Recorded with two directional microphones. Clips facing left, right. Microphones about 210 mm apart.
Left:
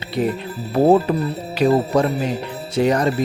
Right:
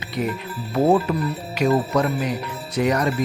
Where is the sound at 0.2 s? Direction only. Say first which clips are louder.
Left 4 dB; 30° left (ahead or behind).